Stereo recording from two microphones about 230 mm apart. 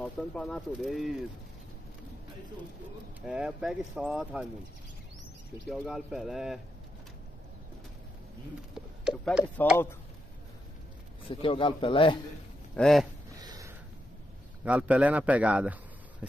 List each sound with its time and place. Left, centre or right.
0.0 s speech: centre
3.2 s speech: centre
5.7 s speech: centre
8.7 s a sound: centre
11.2 s a man's voice: left
12.7 s speech: centre
13.4 s a sound: centre
14.6 s speech: centre